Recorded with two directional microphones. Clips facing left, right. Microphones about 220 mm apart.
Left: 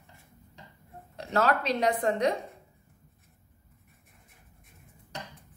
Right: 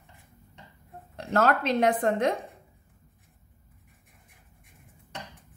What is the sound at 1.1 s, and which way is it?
A woman's voice, 50° right (ahead or behind).